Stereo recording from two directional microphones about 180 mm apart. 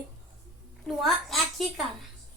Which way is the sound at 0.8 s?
Centre (ahead or behind).